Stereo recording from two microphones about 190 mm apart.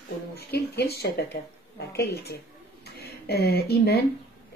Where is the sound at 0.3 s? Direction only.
55° left (ahead or behind).